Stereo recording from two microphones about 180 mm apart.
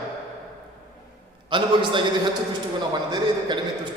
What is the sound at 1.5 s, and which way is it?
Speech, 25° right (ahead or behind).